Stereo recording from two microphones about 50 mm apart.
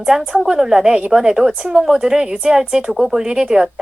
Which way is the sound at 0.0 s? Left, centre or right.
Centre.